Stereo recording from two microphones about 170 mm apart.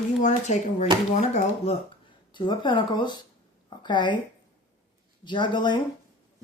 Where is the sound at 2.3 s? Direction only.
30° left (ahead or behind).